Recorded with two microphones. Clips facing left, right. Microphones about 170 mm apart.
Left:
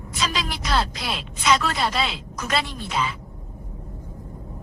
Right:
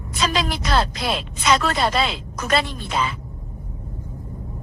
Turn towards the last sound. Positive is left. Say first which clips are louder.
# right 3 dB
turn(degrees=-50)  # may be behind; listen again after turning